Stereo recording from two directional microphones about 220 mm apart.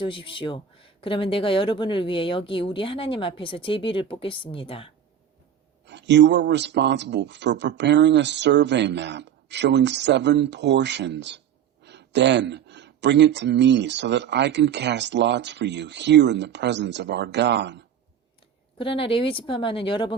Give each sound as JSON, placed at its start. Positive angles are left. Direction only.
{"t": 0.0, "sound": "speech", "side_deg": 25}
{"t": 5.8, "sound": "speech", "side_deg": -50}
{"t": 18.8, "sound": "speech", "side_deg": 25}